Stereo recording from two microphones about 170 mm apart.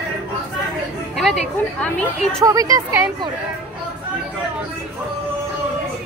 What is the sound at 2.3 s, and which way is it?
Speech, 20° right (ahead or behind).